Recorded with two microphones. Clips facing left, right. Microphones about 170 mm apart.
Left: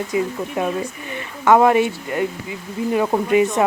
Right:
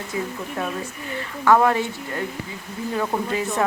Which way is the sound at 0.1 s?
15° left (ahead or behind).